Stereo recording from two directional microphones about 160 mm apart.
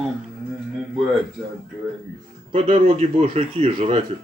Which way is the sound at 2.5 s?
45° right (ahead or behind).